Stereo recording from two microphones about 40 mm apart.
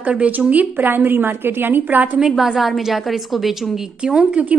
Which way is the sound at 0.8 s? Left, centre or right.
Right.